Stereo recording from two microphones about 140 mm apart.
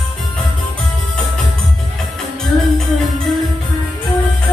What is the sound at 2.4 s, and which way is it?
Music, centre (ahead or behind).